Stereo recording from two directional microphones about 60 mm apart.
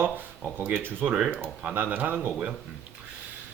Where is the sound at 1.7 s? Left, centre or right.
Right.